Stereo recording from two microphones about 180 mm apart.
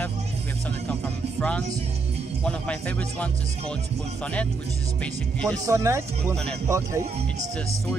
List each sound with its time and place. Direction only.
0.8 s music: 5° left (ahead or behind)
2.4 s a man's voice: 5° left (ahead or behind)
5.0 s speech: 5° left (ahead or behind)
5.7 s speech: 15° right (ahead or behind)